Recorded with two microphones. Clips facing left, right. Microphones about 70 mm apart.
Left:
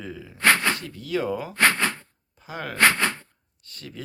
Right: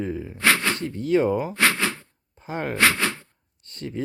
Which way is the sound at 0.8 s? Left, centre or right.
Right.